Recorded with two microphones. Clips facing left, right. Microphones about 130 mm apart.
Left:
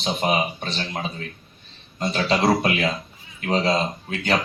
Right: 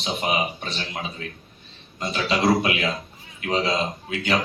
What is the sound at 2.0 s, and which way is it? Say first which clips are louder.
Speech: left 2 dB; 40° left (ahead or behind).